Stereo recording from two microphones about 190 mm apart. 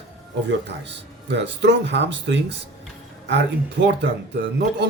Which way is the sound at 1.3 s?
65° right (ahead or behind).